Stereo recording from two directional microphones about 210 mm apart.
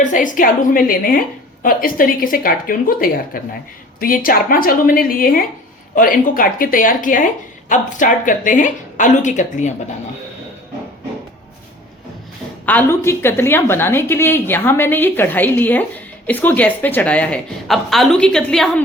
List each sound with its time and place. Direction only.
0.0 s speech: 40° left (ahead or behind)
12.6 s a woman's voice: 10° left (ahead or behind)